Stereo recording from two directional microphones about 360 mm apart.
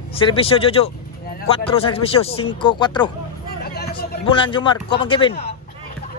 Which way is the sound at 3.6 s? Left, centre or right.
Left.